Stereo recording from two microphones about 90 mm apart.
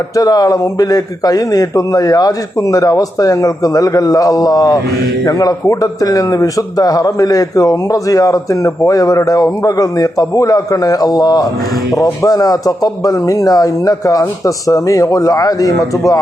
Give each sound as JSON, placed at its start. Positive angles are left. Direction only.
{"t": 0.2, "sound": "a man's voice", "side_deg": 45}